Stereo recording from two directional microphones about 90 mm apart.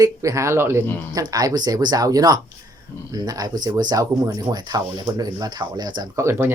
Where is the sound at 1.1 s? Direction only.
45° right (ahead or behind).